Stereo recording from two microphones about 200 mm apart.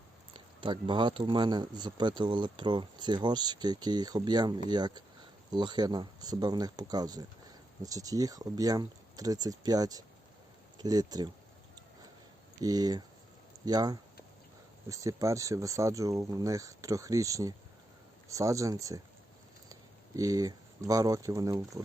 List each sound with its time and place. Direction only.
0.3 s speech: 25° right (ahead or behind)
12.6 s speech: 20° right (ahead or behind)
20.1 s speech: 15° right (ahead or behind)